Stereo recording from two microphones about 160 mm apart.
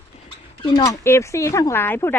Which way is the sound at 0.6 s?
30° left (ahead or behind).